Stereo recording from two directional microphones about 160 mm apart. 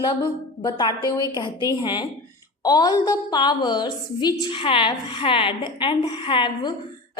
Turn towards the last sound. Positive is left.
turn(degrees=30)  # may be behind; listen again after turning